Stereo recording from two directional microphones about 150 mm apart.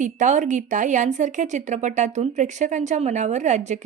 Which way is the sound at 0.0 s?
55° right (ahead or behind).